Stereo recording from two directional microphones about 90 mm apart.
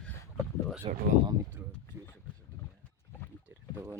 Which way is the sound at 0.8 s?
90° right.